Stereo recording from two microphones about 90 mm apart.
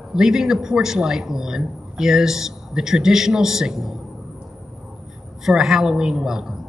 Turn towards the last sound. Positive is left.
turn(degrees=-5)  # may be behind; listen again after turning